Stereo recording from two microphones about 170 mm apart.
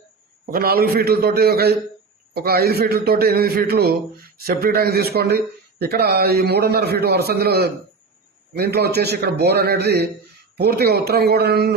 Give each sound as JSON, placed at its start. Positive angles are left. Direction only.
{"t": 0.5, "sound": "a man's voice", "side_deg": -60}